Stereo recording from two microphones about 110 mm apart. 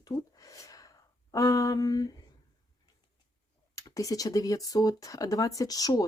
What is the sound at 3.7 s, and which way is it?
Speech, 30° left (ahead or behind).